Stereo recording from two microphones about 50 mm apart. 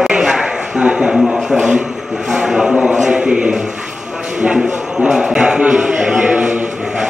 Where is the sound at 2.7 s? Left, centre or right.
Right.